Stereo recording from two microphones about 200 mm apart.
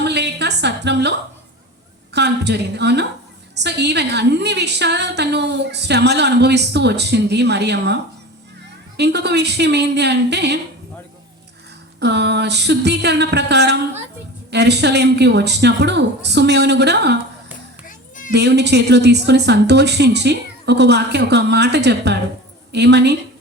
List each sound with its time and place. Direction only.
0.0 s a sound: 55° right (ahead or behind)
2.1 s a woman's voice: 55° right (ahead or behind)
9.0 s a woman's voice: 55° right (ahead or behind)
11.9 s a woman's voice: 55° right (ahead or behind)
18.3 s a woman's voice: 55° right (ahead or behind)